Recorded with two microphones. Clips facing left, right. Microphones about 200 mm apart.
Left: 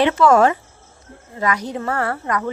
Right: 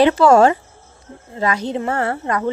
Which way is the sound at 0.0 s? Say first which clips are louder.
Right 3 dB; 35° right (ahead or behind).